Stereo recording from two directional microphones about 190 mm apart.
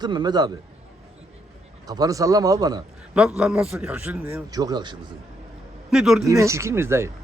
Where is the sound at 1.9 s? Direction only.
20° right (ahead or behind).